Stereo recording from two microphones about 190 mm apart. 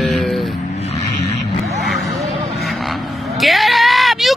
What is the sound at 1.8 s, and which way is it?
Vehicle, centre (ahead or behind).